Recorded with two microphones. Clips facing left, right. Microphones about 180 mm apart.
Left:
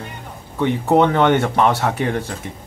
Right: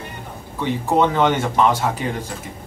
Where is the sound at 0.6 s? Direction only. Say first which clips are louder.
Left 3 dB; 65° left (ahead or behind).